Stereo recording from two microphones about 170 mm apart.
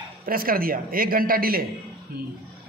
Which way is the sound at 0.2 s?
60° right (ahead or behind).